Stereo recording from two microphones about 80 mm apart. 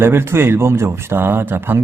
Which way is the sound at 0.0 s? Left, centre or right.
Right.